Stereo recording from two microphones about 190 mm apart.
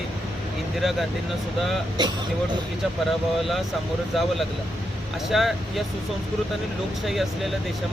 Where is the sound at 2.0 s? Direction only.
20° right (ahead or behind).